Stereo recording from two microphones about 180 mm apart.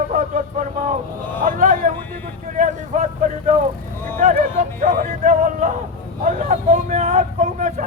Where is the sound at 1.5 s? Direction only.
50° right (ahead or behind).